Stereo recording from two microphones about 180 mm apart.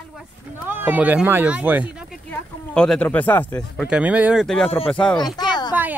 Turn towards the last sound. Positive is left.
turn(degrees=25)  # may be behind; listen again after turning